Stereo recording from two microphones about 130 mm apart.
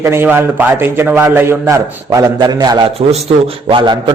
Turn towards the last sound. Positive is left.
turn(degrees=-40)  # may be behind; listen again after turning